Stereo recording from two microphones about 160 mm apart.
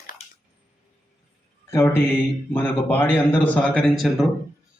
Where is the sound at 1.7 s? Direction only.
15° left (ahead or behind).